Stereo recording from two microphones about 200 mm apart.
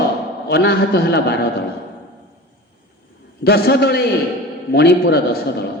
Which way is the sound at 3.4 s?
55° left (ahead or behind).